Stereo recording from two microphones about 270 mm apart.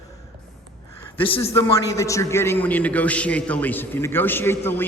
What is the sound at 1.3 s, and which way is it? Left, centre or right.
Speech, left.